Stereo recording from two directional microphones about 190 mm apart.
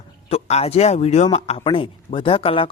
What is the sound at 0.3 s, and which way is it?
Speech, 35° left (ahead or behind).